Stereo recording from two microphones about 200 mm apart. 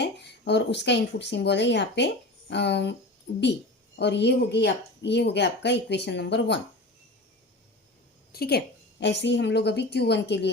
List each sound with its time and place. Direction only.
0.0 s speech: 55° left (ahead or behind)
8.3 s speech: 50° left (ahead or behind)